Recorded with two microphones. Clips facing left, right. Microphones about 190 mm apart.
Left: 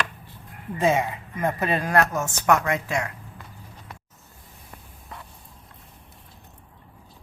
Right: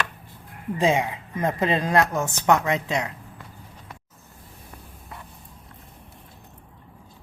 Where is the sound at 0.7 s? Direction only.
15° right (ahead or behind).